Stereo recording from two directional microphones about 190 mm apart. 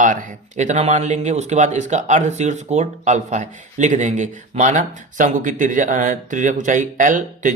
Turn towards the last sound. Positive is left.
turn(degrees=-45)  # may be behind; listen again after turning